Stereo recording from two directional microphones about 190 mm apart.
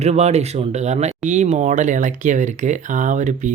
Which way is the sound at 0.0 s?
35° right (ahead or behind).